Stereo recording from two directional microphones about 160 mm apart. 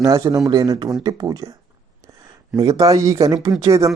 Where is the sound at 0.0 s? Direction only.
20° right (ahead or behind).